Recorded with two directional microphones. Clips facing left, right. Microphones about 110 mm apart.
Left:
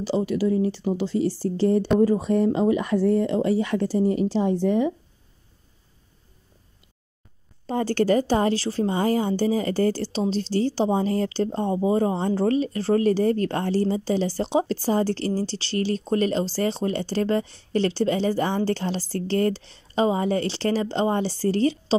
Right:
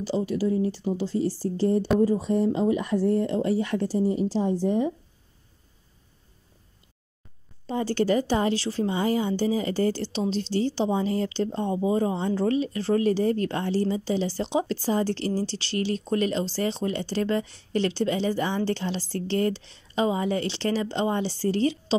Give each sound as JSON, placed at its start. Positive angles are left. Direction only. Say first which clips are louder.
{"t": 0.0, "sound": "speech", "louder": "left 3 dB", "side_deg": 75}
{"t": 2.0, "sound": "speech", "louder": "left 3 dB", "side_deg": 70}
{"t": 7.6, "sound": "a woman's voice", "louder": "left 3 dB", "side_deg": 50}